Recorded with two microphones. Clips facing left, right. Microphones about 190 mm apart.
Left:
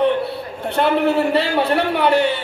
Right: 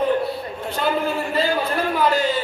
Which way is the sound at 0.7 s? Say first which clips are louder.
Left 6 dB; 70° left (ahead or behind).